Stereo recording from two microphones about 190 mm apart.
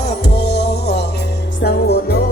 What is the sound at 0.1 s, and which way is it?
Music, 60° left (ahead or behind).